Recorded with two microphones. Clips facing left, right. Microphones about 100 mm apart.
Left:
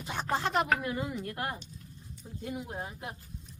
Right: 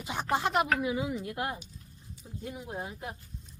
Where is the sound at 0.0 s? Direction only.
10° right (ahead or behind).